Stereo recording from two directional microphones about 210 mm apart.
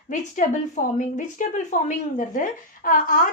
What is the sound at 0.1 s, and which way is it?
Speech, 35° left (ahead or behind).